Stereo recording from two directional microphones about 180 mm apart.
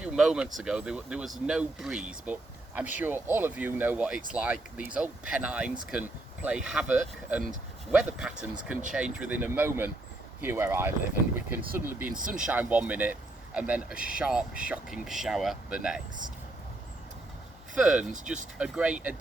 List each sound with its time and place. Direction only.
0.0 s speech: 5° right (ahead or behind)
12.0 s speech: 50° right (ahead or behind)
12.5 s speech: 10° right (ahead or behind)
17.7 s speech: 5° right (ahead or behind)